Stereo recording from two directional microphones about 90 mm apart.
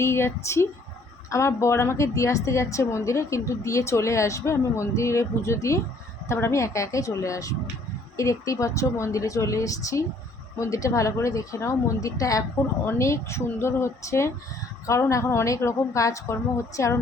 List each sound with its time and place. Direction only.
0.0 s a woman's voice: 30° left (ahead or behind)